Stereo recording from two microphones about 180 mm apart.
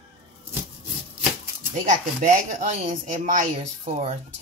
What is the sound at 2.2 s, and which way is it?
Speech, 45° right (ahead or behind).